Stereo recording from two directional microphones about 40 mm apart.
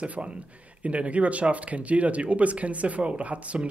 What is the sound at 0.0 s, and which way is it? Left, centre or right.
Speech, right.